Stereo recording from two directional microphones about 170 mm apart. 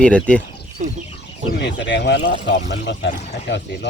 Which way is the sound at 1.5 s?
85° left.